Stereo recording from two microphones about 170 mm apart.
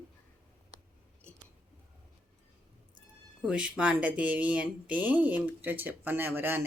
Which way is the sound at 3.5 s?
5° right (ahead or behind).